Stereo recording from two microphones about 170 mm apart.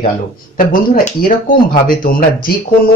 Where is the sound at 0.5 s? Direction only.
55° left (ahead or behind).